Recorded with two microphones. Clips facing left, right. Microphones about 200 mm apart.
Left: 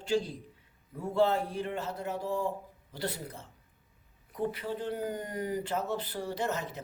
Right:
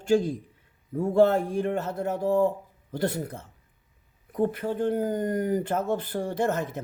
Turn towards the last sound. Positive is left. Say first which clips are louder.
# right 7 dB
turn(degrees=-50)  # may be behind; listen again after turning